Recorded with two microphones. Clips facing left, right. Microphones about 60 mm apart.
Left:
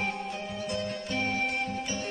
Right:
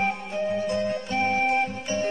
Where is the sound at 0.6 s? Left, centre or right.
Right.